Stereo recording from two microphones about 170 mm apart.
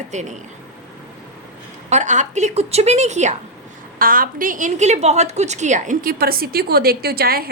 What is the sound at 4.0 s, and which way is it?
A woman's voice, 55° right (ahead or behind).